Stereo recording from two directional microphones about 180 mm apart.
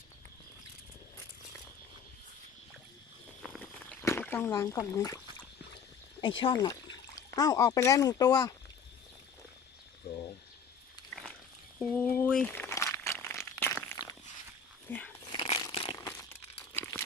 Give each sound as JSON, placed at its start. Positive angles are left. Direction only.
{"t": 3.4, "sound": "walk", "side_deg": 5}
{"t": 4.9, "sound": "speech", "side_deg": 20}
{"t": 6.2, "sound": "speech", "side_deg": 25}
{"t": 11.1, "sound": "a sound", "side_deg": 0}
{"t": 11.8, "sound": "crumpling", "side_deg": 5}
{"t": 14.8, "sound": "dog", "side_deg": 10}
{"t": 15.3, "sound": "a sound", "side_deg": 30}
{"t": 16.6, "sound": "crumpling", "side_deg": 10}